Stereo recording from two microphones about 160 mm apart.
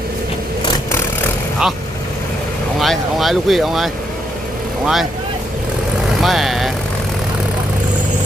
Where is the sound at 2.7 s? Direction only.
Centre (ahead or behind).